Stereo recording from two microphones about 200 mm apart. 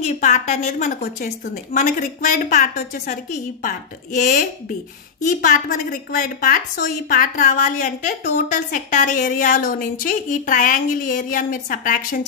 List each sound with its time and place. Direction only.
0.0 s a woman's voice: 35° left (ahead or behind)